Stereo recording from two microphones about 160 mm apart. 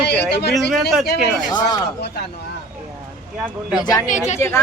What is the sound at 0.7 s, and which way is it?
Speech, centre (ahead or behind).